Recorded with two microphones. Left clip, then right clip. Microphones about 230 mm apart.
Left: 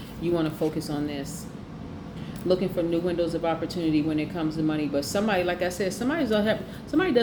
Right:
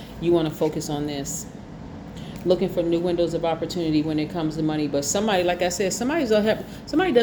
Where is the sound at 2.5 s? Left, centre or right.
Right.